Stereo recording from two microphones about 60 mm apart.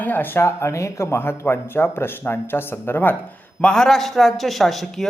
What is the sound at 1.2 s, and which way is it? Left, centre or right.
Speech, left.